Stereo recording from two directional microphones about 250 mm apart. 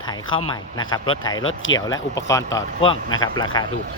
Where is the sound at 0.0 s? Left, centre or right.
Centre.